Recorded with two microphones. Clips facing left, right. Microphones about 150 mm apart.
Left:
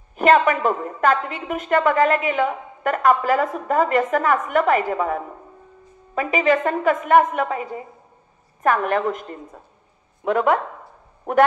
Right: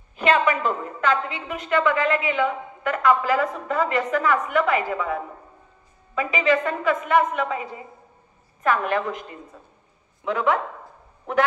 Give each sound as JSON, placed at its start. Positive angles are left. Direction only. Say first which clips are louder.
{"t": 0.1, "sound": "a woman's voice", "louder": "left 4 dB", "side_deg": 50}